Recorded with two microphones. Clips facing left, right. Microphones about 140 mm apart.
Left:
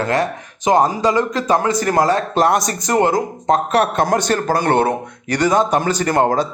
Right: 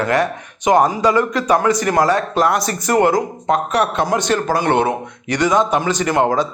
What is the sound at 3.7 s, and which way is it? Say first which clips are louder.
A man's voice: left 2 dB; 50° left (ahead or behind).